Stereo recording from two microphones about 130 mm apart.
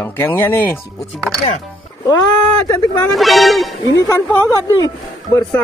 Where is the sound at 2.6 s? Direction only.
30° left (ahead or behind).